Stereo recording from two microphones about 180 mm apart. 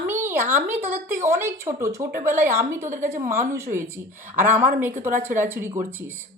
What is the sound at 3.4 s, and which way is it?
A woman's voice, 15° right (ahead or behind).